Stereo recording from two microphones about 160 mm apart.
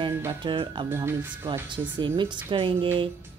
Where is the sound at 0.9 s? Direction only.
15° right (ahead or behind).